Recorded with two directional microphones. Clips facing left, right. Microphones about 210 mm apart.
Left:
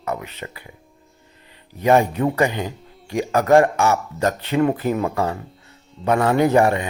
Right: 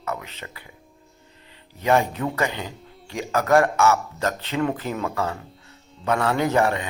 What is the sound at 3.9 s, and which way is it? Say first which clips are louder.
Speech: left 3 dB; 15° left (ahead or behind).